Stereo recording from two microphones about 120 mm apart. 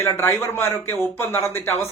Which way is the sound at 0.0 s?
20° left (ahead or behind).